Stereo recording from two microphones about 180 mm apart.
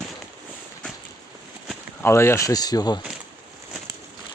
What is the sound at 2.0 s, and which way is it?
Speech, 15° left (ahead or behind).